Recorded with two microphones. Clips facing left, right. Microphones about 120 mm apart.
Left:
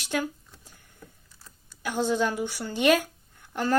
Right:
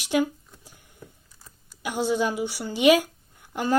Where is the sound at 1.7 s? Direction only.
10° right (ahead or behind).